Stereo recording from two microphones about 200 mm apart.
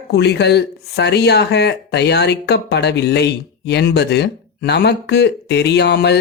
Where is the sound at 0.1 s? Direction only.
55° left (ahead or behind).